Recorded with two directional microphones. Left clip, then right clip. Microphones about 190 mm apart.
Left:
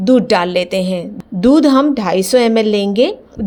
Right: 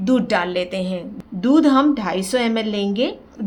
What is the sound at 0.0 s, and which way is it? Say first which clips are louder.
A woman's voice: left 7 dB; 30° left (ahead or behind).